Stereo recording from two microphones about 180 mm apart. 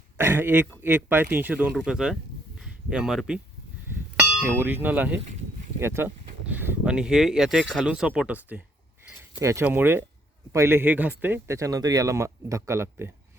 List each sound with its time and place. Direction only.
0.2 s speech: 10° right (ahead or behind)